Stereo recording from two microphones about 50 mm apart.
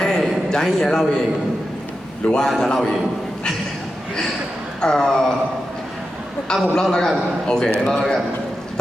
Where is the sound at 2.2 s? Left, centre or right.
Centre.